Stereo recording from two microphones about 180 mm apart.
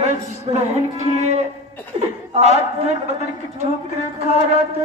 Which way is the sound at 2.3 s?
35° right (ahead or behind).